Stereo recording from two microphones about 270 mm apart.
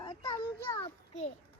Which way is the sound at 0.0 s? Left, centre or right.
Centre.